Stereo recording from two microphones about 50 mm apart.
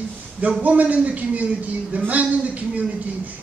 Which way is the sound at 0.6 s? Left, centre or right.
Right.